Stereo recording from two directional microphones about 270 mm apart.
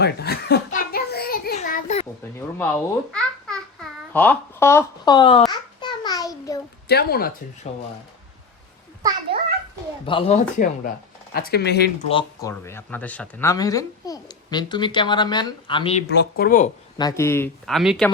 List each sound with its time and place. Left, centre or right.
0.0 s a sound: left
2.6 s a child's voice: centre
5.5 s babbling: centre
6.8 s speech: left
9.0 s a child's voice: centre
10.1 s speech: left
11.3 s speech: left
12.0 s speech: centre
16.1 s speech: left
17.0 s speech: centre